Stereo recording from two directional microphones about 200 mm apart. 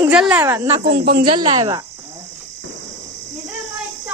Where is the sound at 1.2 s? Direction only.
25° right (ahead or behind).